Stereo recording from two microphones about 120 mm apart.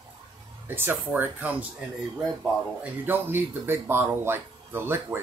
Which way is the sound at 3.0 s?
20° right (ahead or behind).